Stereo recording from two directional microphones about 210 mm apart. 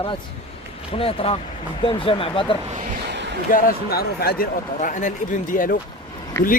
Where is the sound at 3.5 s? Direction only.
45° left (ahead or behind).